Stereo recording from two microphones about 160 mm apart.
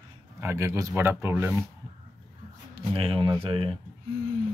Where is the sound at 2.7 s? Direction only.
35° right (ahead or behind).